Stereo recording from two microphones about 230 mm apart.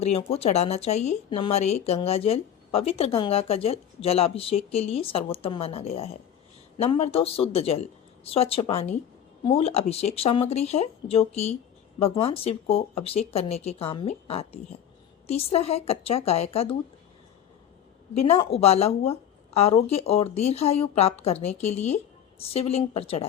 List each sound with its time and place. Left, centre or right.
0.0 s speech: left
18.5 s speech: left